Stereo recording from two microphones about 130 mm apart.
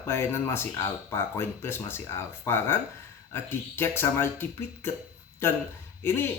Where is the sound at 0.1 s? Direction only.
20° left (ahead or behind).